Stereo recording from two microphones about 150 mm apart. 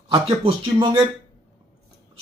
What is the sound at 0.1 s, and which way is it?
Speech, 35° right (ahead or behind).